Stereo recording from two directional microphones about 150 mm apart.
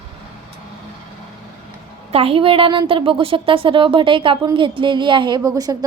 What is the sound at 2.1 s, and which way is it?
A woman's voice, 40° right (ahead or behind).